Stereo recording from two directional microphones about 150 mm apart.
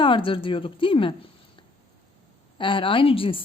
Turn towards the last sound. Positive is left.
turn(degrees=35)  # may be behind; listen again after turning